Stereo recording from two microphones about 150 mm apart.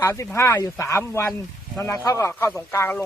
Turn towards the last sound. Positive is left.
turn(degrees=15)  # may be behind; listen again after turning